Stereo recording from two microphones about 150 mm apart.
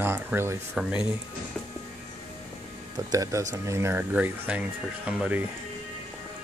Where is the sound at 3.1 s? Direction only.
20° right (ahead or behind).